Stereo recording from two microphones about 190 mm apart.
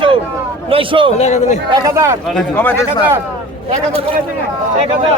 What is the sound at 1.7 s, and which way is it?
Speech, 15° right (ahead or behind).